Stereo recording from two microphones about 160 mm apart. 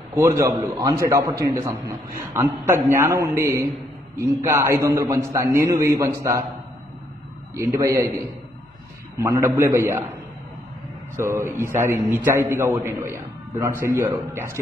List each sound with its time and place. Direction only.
0.1 s a man's voice: 20° right (ahead or behind)
7.5 s a man's voice: 20° right (ahead or behind)
9.2 s a man's voice: 15° right (ahead or behind)
11.3 s a man's voice: 15° right (ahead or behind)